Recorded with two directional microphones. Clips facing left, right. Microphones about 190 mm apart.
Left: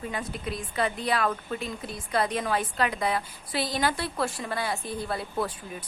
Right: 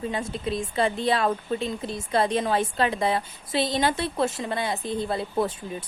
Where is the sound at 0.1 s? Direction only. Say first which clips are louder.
Right 5 dB; 25° right (ahead or behind).